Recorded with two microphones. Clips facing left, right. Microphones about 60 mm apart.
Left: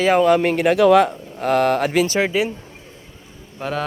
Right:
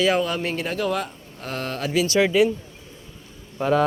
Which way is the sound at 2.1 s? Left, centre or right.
Centre.